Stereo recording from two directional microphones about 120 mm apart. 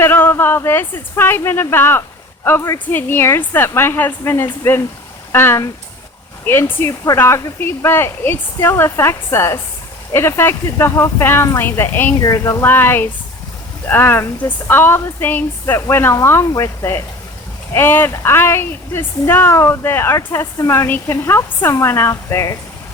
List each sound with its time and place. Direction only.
0.0 s speech: 20° left (ahead or behind)